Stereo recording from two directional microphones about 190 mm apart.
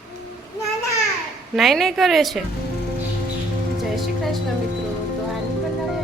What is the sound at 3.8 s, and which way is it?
Music, centre (ahead or behind).